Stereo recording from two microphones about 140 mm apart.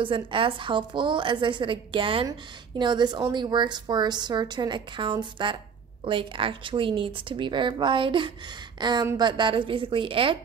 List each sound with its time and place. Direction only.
0.0 s a woman's voice: 35° right (ahead or behind)